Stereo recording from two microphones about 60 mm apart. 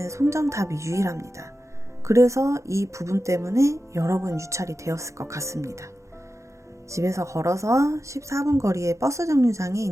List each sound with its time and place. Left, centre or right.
0.0 s speech: right
6.9 s speech: right